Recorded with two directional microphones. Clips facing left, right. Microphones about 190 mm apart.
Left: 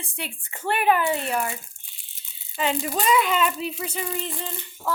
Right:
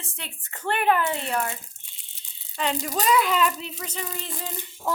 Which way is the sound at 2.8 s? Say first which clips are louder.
Right 1 dB; centre (ahead or behind).